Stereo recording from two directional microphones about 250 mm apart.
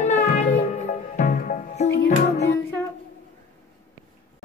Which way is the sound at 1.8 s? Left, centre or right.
Left.